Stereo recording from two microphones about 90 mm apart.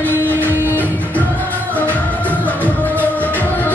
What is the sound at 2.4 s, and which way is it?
Music, 15° left (ahead or behind).